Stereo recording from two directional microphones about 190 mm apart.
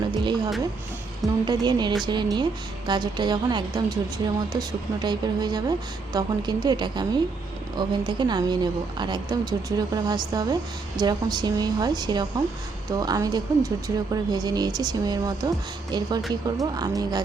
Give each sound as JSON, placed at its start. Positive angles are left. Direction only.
{"t": 0.2, "sound": "a woman's voice", "side_deg": -25}
{"t": 5.0, "sound": "a woman's voice", "side_deg": -20}